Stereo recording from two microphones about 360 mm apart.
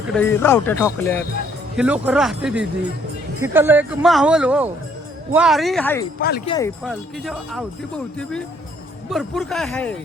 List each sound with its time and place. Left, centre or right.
0.1 s speech: centre
6.1 s speech: left
6.5 s speech: centre